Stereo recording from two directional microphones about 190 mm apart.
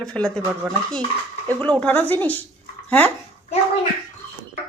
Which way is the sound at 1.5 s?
10° left (ahead or behind).